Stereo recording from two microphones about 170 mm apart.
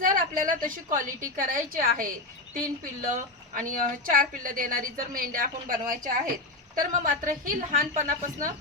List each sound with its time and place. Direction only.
0.0 s a woman's voice: 50° right (ahead or behind)